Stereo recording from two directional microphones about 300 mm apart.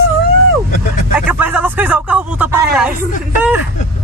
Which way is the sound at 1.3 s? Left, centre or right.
Centre.